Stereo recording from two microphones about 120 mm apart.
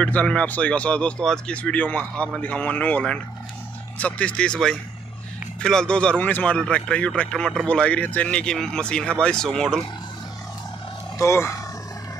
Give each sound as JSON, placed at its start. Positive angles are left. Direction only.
{"t": 0.0, "sound": "speech", "side_deg": 10}
{"t": 11.1, "sound": "speech", "side_deg": 25}